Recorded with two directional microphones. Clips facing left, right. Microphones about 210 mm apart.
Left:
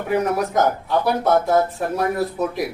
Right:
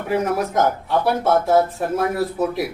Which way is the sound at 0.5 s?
Centre (ahead or behind).